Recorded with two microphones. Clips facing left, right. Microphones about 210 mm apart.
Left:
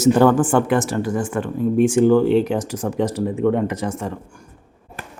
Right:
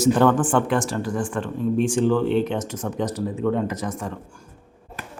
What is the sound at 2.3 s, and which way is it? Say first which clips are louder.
Speech: left 4 dB; 35° left (ahead or behind).